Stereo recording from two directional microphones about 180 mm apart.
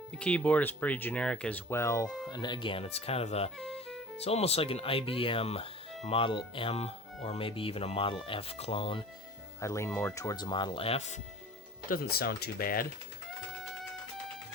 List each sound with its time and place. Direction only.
0.2 s speech: 5° left (ahead or behind)
2.3 s speech: 25° left (ahead or behind)
9.6 s speech: 15° left (ahead or behind); by 11.1 s 35° left (ahead or behind)
11.9 s speech: 55° left (ahead or behind)